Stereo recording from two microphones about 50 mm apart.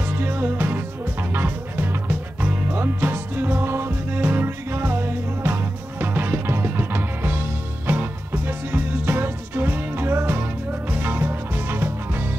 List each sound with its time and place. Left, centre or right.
0.2 s music: right